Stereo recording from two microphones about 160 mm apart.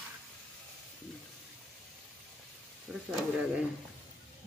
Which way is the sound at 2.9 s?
Centre (ahead or behind).